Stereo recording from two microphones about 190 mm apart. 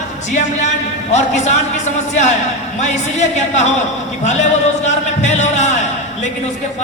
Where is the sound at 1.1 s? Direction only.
35° left (ahead or behind).